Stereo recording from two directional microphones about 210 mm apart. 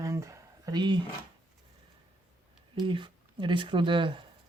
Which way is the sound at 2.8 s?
25° right (ahead or behind).